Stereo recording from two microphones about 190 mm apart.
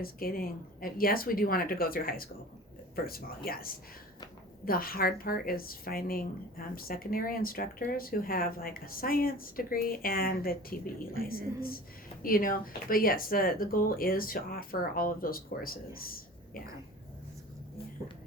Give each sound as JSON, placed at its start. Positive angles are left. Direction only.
{"t": 0.0, "sound": "speech", "side_deg": 50}